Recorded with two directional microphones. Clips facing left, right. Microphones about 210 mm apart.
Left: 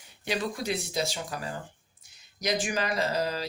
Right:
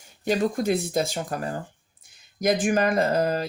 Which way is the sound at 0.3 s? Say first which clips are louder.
Right 8 dB; 45° right (ahead or behind).